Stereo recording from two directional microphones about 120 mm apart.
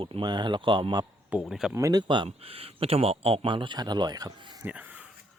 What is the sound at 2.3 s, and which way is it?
Speech, 55° right (ahead or behind).